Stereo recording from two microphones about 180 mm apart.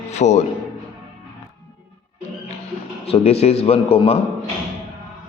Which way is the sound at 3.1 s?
35° left (ahead or behind).